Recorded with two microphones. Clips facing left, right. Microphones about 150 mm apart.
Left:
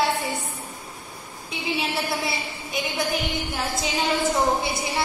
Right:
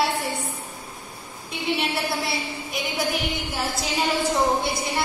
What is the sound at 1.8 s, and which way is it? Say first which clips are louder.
A woman's voice: even; centre (ahead or behind).